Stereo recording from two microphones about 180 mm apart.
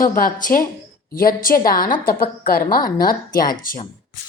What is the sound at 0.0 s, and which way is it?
A woman's voice, 50° left (ahead or behind).